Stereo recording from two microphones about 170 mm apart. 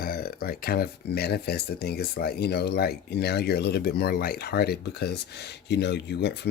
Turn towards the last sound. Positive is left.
turn(degrees=80)